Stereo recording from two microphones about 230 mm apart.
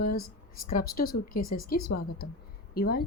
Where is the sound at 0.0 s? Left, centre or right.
Left.